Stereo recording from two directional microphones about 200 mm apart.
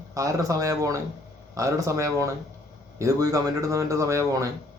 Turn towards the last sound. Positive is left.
turn(degrees=-15)  # may be behind; listen again after turning